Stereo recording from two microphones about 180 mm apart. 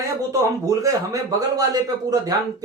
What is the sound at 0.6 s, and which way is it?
A man's voice, 20° right (ahead or behind).